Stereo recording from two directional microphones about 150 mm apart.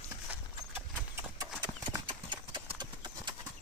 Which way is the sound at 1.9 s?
30° right (ahead or behind).